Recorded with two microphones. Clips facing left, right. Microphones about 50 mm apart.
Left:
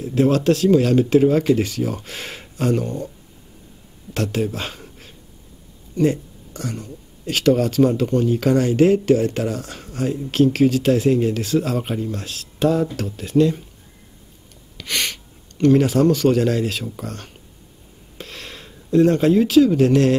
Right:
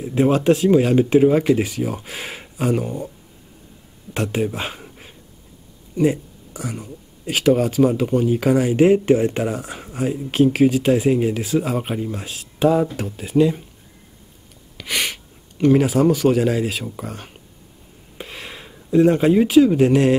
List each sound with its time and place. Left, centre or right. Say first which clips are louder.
0.0 s speech: even; centre
4.1 s speech: even; centre
14.8 s speech: right 1 dB; centre
18.1 s a sound: right 2 dB; centre